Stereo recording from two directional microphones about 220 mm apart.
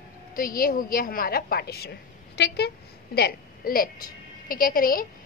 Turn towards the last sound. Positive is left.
turn(degrees=40)  # may be behind; listen again after turning